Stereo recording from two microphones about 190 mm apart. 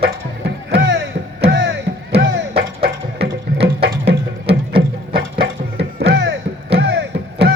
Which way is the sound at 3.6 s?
60° right (ahead or behind).